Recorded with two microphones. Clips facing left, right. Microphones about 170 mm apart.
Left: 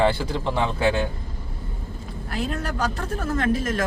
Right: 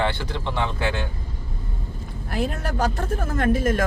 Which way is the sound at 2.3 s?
45° right (ahead or behind).